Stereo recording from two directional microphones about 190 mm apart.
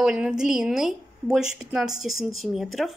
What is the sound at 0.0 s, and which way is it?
A woman's voice, 5° right (ahead or behind).